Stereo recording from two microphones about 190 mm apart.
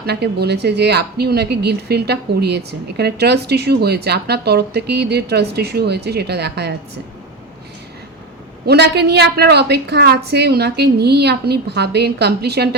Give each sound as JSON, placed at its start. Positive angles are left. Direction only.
{"t": 0.0, "sound": "speech", "side_deg": -60}
{"t": 8.6, "sound": "speech", "side_deg": -60}